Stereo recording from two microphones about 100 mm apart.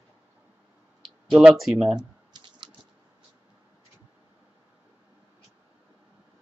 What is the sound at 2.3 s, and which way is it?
Typing, 50° right (ahead or behind).